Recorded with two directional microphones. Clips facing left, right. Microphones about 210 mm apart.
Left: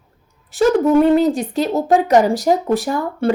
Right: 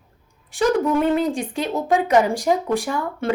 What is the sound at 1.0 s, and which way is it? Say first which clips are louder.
Speech: left 6 dB; 35° left (ahead or behind).